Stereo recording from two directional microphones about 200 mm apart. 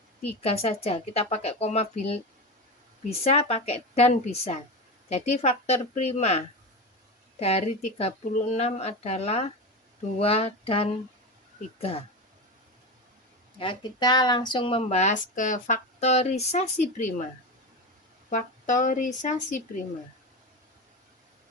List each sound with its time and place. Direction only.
0.4 s speech: 30° left (ahead or behind)
13.6 s speech: 20° left (ahead or behind)
18.3 s speech: 40° left (ahead or behind)